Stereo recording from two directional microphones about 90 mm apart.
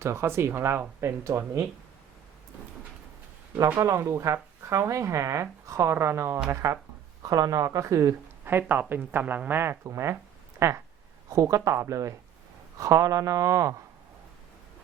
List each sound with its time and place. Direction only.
0.0 s speech: 30° right (ahead or behind)
3.8 s speech: 35° right (ahead or behind)
8.4 s speech: 25° right (ahead or behind)